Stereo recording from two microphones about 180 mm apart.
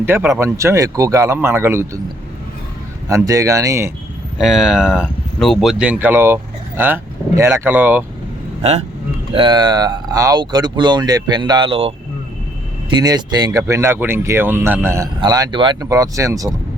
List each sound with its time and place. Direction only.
0.0 s speech: 10° right (ahead or behind)
3.1 s speech: 20° right (ahead or behind)
4.4 s speech: centre (ahead or behind)
9.3 s speech: 25° right (ahead or behind)